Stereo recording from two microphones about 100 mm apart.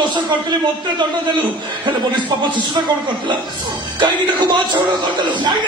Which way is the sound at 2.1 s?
50° right (ahead or behind).